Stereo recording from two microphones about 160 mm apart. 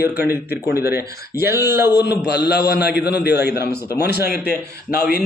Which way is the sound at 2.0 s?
90° left.